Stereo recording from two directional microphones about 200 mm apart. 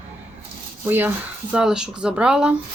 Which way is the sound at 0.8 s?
10° right (ahead or behind).